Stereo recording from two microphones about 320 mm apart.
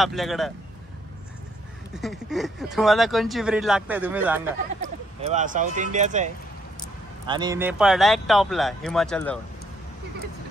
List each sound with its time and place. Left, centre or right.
0.0 s speech: centre
2.0 s speech: centre
5.2 s speech: right; by 9.4 s centre